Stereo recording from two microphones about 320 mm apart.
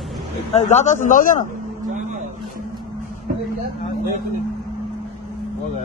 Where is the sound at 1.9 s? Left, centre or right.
Right.